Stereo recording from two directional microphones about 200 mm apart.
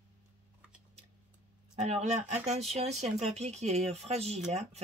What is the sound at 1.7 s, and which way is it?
Speech, 35° right (ahead or behind).